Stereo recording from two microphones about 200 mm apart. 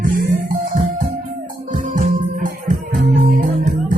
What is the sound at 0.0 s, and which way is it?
Music, 40° right (ahead or behind).